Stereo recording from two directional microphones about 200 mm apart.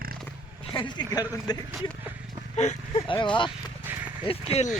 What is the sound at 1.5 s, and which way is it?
Speech, 20° left (ahead or behind).